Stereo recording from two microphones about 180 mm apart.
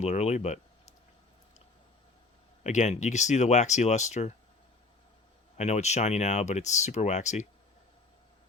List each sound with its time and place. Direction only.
0.0 s speech: 40° left (ahead or behind)
2.6 s speech: 40° left (ahead or behind)
5.5 s speech: 40° left (ahead or behind)